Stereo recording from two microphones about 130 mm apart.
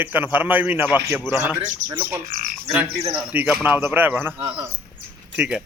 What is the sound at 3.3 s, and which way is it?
Speech, 15° right (ahead or behind).